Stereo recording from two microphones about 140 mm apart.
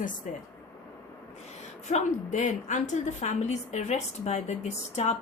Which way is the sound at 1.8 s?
55° left (ahead or behind).